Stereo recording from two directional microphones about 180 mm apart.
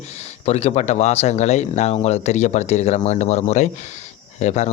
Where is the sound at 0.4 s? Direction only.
35° left (ahead or behind).